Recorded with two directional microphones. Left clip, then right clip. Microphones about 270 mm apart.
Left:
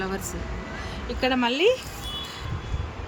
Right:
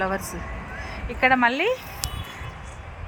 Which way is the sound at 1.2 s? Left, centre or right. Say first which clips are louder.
Right 4 dB; centre.